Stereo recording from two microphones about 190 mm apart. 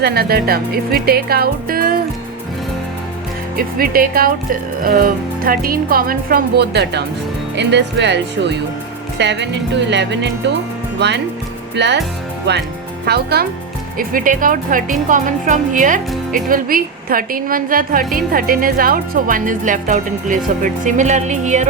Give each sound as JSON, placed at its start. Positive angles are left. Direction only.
{"t": 0.0, "sound": "a woman's voice", "side_deg": -55}
{"t": 3.8, "sound": "a woman's voice", "side_deg": -50}
{"t": 14.1, "sound": "a woman's voice", "side_deg": -45}